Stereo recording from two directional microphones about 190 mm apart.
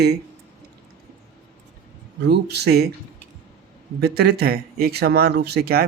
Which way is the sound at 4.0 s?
60° right (ahead or behind).